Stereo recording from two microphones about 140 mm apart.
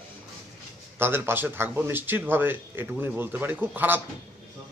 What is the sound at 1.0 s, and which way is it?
A man's voice, 15° right (ahead or behind).